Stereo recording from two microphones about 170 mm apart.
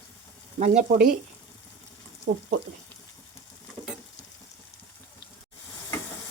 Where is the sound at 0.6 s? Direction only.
45° right (ahead or behind).